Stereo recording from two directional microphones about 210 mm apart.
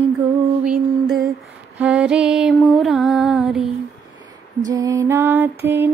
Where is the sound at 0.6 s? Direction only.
Centre (ahead or behind).